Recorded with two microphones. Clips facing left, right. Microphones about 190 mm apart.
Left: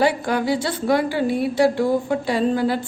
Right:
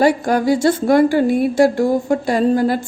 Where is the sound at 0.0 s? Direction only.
45° right (ahead or behind).